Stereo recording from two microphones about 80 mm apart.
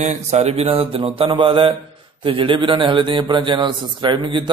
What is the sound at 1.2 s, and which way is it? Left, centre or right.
A man's voice, right.